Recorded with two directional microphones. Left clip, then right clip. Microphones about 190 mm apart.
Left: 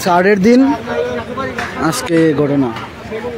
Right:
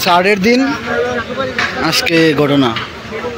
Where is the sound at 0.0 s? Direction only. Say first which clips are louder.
Even; 30° left (ahead or behind).